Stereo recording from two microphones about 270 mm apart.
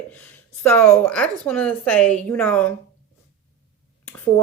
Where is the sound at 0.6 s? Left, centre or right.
Centre.